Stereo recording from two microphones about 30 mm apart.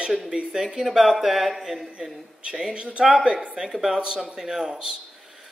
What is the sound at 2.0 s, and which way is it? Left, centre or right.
Speech, right.